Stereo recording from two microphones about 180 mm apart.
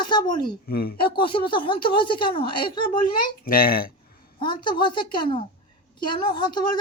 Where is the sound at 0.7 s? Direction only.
55° left (ahead or behind).